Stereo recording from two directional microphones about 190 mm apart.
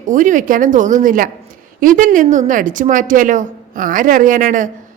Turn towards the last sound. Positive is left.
turn(degrees=-45)  # may be behind; listen again after turning